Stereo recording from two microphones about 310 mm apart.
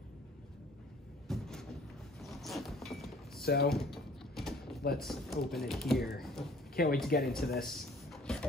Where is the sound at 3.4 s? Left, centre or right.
Left.